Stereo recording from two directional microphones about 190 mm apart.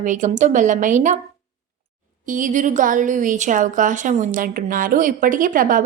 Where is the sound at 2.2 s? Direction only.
45° right (ahead or behind).